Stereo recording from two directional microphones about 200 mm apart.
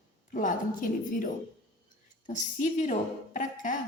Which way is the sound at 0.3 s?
40° left (ahead or behind).